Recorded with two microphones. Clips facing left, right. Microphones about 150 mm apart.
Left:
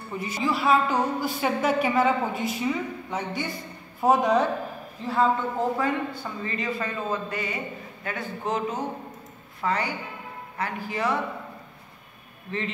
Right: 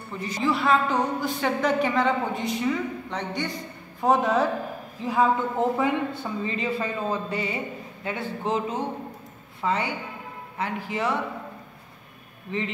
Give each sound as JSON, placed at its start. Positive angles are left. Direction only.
{"t": 0.2, "sound": "a woman's voice", "side_deg": 5}
{"t": 5.0, "sound": "a man's voice", "side_deg": -15}
{"t": 12.4, "sound": "a man's voice", "side_deg": -15}